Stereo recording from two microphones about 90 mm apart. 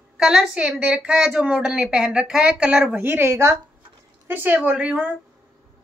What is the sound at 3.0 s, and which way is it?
Speech, 25° right (ahead or behind).